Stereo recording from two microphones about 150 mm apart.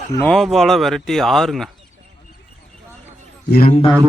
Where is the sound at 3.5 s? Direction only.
90° left.